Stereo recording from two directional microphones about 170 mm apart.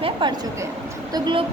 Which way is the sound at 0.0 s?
30° right (ahead or behind).